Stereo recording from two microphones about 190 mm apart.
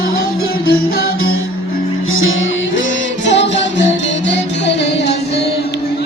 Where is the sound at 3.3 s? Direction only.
65° left (ahead or behind).